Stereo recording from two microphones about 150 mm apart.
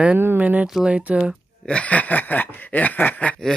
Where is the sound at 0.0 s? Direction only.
10° right (ahead or behind).